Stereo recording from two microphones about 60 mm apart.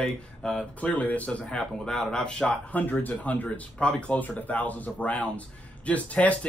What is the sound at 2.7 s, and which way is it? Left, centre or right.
Speech, left.